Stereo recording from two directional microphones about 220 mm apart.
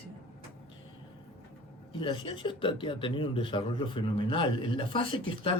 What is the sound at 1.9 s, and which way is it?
Speech, 20° left (ahead or behind).